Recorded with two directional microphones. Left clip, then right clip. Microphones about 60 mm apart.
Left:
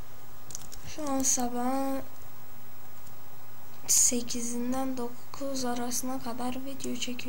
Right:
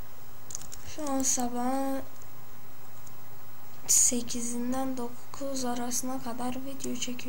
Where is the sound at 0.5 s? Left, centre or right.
Right.